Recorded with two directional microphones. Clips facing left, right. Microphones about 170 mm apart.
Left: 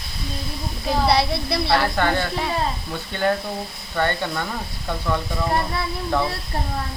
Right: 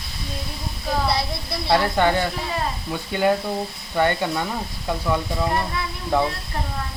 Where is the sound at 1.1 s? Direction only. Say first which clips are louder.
Left 5 dB; 70° left (ahead or behind).